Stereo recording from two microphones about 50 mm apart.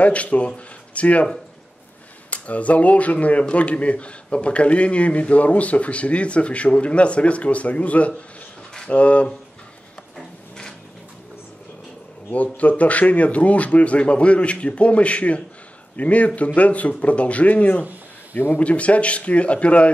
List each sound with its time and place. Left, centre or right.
0.0 s speech: left
2.3 s speech: left
12.3 s speech: left
18.3 s speech: left
18.6 s speech: left